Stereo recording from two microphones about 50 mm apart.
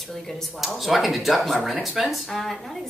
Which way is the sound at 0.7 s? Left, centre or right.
Centre.